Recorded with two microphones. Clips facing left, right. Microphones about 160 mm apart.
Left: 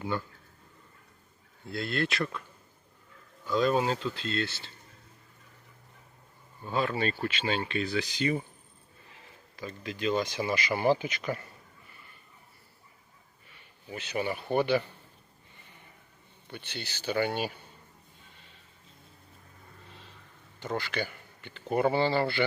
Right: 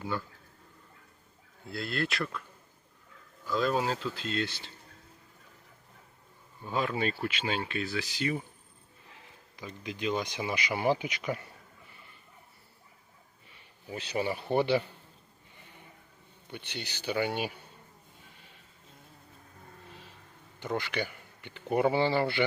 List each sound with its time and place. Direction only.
0.0 s speech: centre (ahead or behind)
1.7 s speech: centre (ahead or behind)
3.4 s speech: centre (ahead or behind); by 4.7 s 15° right (ahead or behind)
6.7 s speech: 10° right (ahead or behind)
9.6 s speech: 15° right (ahead or behind)
13.9 s speech: 30° right (ahead or behind)
16.5 s speech: 15° right (ahead or behind)
20.6 s speech: 15° right (ahead or behind)